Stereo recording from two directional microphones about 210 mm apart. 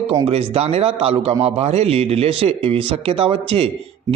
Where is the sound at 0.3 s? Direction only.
25° right (ahead or behind).